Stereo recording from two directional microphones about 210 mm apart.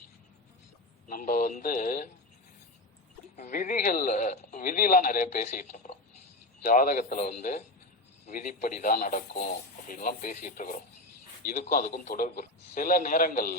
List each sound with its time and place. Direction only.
1.0 s a man's voice: 40° left (ahead or behind)
3.3 s a man's voice: 35° left (ahead or behind)